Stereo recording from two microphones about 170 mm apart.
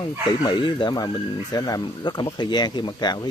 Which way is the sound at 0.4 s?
30° left (ahead or behind).